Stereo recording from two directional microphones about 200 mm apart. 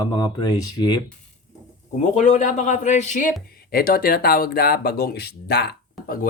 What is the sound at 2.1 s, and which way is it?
Speech, 35° left (ahead or behind).